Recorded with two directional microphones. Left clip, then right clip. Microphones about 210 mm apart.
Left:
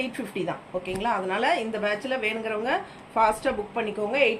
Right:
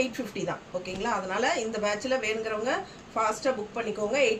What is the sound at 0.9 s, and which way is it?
A woman's voice, 20° right (ahead or behind).